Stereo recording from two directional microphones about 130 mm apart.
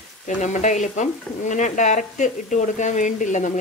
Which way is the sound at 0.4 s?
65° left (ahead or behind).